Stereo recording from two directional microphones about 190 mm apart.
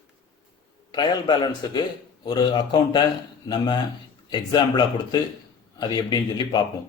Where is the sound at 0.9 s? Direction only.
20° left (ahead or behind).